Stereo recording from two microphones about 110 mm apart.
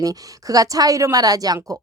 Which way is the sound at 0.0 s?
35° right (ahead or behind).